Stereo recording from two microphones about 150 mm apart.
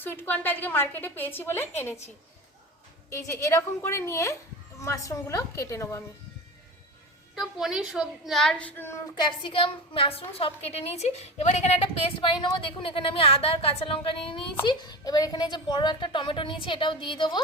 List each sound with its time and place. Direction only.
0.0 s a woman's voice: 15° left (ahead or behind)
3.1 s a woman's voice: 20° left (ahead or behind)
7.3 s a woman's voice: 5° right (ahead or behind); by 9.0 s 15° left (ahead or behind)
9.2 s a woman's voice: 35° left (ahead or behind)